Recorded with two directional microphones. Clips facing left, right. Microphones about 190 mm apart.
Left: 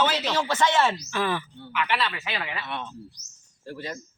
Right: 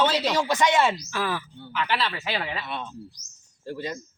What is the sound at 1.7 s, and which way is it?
Speech, 30° right (ahead or behind).